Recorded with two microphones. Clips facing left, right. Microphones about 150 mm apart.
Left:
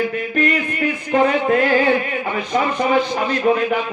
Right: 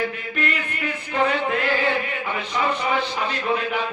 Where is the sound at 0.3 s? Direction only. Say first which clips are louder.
Left 9 dB; 45° left (ahead or behind).